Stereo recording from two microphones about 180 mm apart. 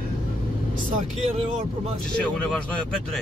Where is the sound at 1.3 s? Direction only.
35° right (ahead or behind).